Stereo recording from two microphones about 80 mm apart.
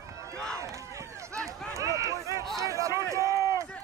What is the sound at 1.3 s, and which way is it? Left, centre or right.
Run, right.